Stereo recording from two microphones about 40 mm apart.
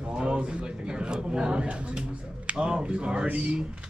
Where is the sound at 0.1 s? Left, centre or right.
Right.